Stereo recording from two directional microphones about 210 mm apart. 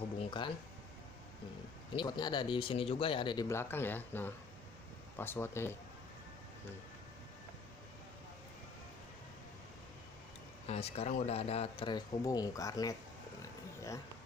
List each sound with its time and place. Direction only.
0.2 s a sound: 20° left (ahead or behind)
2.0 s speech: 20° left (ahead or behind)
10.7 s speech: 30° left (ahead or behind)
13.4 s roaring cats: 15° left (ahead or behind)